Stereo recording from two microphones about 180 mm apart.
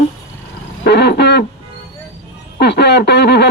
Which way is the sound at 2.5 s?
65° left (ahead or behind).